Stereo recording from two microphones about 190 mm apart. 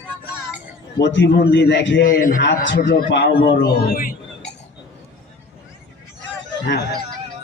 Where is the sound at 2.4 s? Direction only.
70° left (ahead or behind); by 4.2 s 50° left (ahead or behind).